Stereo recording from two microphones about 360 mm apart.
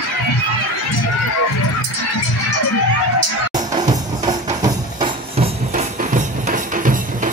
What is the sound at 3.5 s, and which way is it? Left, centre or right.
Music, centre.